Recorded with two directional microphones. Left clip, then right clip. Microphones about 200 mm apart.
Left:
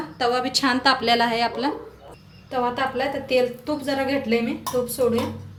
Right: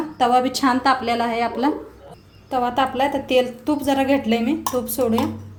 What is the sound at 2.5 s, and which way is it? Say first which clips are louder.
A woman's voice: right 3 dB; 50° right (ahead or behind).